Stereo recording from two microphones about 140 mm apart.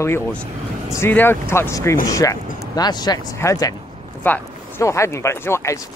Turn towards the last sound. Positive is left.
turn(degrees=20)  # may be behind; listen again after turning